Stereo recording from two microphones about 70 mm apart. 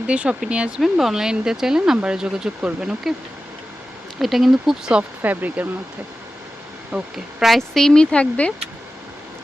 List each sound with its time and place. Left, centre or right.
0.1 s speech: centre
0.8 s speech: centre
4.2 s speech: centre
5.2 s speech: right
6.9 s speech: centre
7.5 s speech: centre